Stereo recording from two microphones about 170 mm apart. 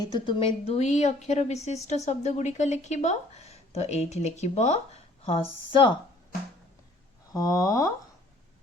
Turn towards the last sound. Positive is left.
turn(degrees=20)  # may be behind; listen again after turning